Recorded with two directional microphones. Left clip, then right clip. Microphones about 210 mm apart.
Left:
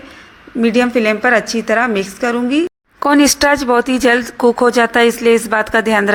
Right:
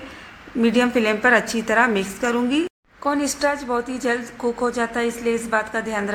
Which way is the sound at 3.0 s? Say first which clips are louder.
Left 10 dB; 45° left (ahead or behind).